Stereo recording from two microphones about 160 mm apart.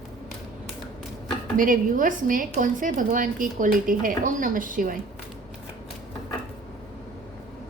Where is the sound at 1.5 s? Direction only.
55° right (ahead or behind).